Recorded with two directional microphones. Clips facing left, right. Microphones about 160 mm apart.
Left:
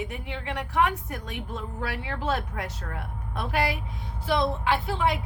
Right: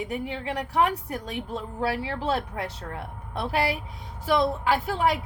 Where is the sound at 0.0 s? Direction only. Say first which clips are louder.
Right 4 dB; 35° right (ahead or behind).